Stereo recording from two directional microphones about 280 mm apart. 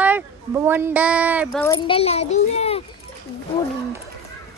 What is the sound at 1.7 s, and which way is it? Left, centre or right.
A child's voice, centre.